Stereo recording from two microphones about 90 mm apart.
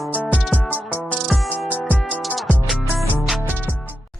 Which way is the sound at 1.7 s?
15° left (ahead or behind).